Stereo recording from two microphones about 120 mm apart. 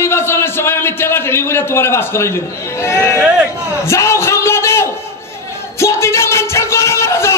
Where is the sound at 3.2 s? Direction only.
10° right (ahead or behind).